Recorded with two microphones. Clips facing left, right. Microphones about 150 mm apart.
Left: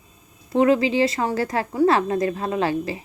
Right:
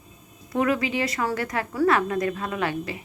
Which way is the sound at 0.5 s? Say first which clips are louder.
Left 6 dB; 30° left (ahead or behind).